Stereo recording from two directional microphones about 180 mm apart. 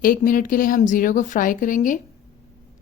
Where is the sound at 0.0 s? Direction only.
50° left (ahead or behind).